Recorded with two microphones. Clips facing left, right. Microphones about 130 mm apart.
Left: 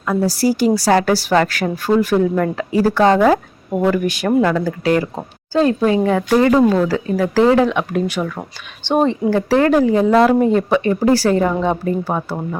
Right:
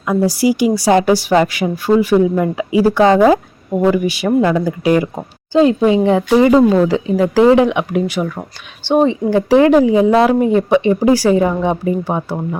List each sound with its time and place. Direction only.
0.1 s speech: 15° right (ahead or behind)